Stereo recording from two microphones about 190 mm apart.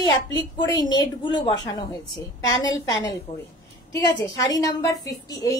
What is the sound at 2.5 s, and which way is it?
Speech, 75° left (ahead or behind).